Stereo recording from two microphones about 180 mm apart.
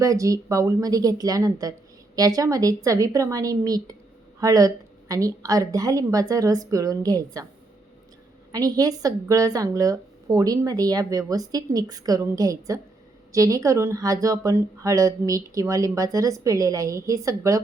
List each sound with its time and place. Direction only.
0.0 s speech: 20° right (ahead or behind)
8.5 s speech: 20° right (ahead or behind)